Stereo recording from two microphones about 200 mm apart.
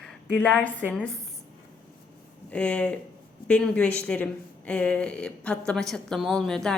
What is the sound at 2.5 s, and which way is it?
A woman's voice, 5° left (ahead or behind).